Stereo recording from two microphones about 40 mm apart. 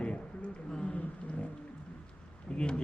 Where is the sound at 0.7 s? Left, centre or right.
Centre.